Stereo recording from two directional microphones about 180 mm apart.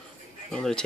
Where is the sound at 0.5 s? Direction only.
5° left (ahead or behind).